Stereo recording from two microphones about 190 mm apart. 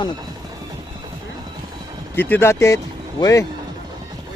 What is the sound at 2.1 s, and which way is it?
Speech, 10° left (ahead or behind).